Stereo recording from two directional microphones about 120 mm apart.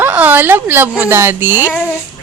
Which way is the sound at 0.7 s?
15° right (ahead or behind).